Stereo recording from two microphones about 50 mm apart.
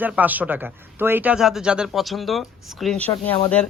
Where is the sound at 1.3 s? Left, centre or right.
Centre.